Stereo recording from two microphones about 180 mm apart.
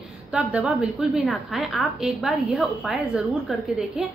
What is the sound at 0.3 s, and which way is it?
A woman's voice, 5° right (ahead or behind).